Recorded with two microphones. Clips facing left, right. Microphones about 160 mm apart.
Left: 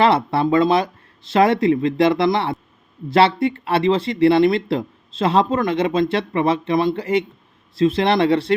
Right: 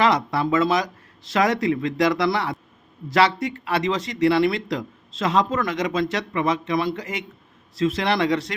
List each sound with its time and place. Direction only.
0.0 s speech: 30° left (ahead or behind)